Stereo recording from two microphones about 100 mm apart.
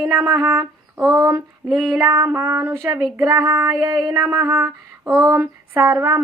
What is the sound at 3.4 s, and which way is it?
Music, 25° right (ahead or behind).